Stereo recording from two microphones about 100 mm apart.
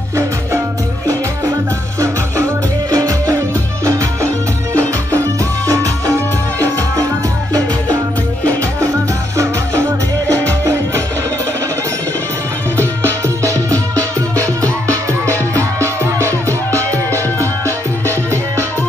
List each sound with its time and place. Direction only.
2.0 s music: 30° right (ahead or behind)
9.4 s music: 30° right (ahead or behind)
12.7 s music: 30° right (ahead or behind)